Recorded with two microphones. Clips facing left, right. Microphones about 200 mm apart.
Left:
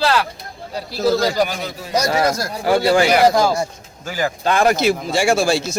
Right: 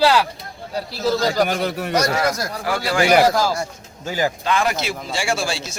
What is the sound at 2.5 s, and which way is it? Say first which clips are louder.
A man's voice: left 7 dB; 25° left (ahead or behind).